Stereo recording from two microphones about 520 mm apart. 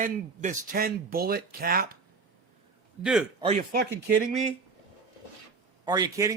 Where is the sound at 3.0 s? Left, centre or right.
Centre.